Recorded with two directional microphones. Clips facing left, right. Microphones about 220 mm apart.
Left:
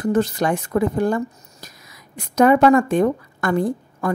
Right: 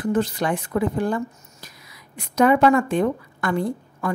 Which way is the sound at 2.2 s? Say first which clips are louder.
Left 3 dB; 45° left (ahead or behind).